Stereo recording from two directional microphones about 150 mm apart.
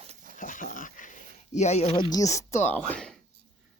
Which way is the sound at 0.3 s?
60° left (ahead or behind).